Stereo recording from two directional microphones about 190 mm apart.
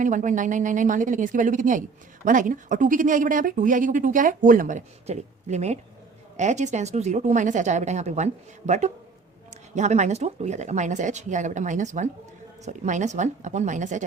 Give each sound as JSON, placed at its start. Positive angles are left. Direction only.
{"t": 0.0, "sound": "speech", "side_deg": -40}